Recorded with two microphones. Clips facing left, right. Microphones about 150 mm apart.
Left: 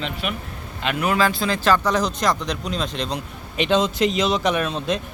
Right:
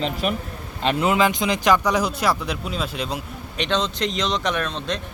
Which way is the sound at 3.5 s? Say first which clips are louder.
Left 4 dB; 5° left (ahead or behind).